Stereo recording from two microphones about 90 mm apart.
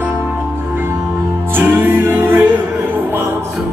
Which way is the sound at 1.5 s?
25° right (ahead or behind).